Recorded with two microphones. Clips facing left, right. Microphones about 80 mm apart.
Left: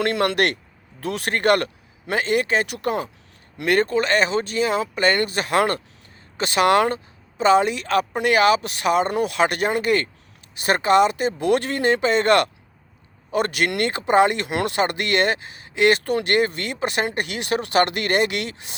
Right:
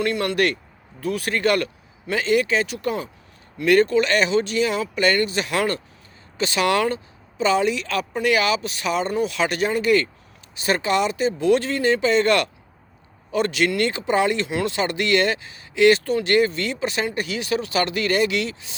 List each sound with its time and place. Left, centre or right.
0.0 s speech: left
3.7 s speech: left